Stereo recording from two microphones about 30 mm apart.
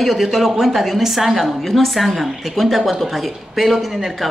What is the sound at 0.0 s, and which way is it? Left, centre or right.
A woman's voice, centre.